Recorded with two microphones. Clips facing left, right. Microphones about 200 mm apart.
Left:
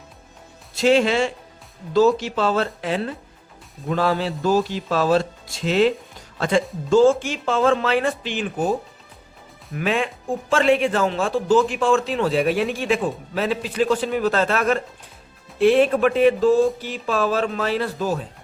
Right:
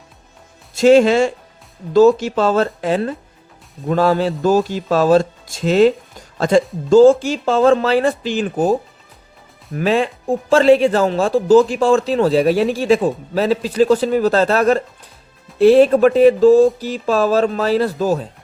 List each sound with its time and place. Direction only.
0.8 s a man's voice: 45° right (ahead or behind)
6.9 s speech: 35° right (ahead or behind)
9.7 s speech: 35° right (ahead or behind)